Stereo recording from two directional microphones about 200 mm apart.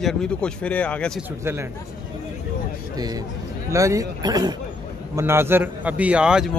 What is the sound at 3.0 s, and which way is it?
A man's voice, 20° right (ahead or behind).